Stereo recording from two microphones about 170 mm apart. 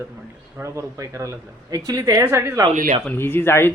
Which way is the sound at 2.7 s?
45° right (ahead or behind).